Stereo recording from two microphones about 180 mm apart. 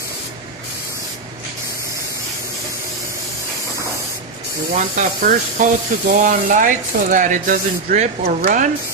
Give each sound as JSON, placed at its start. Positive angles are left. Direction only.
{"t": 4.7, "sound": "speech", "side_deg": -45}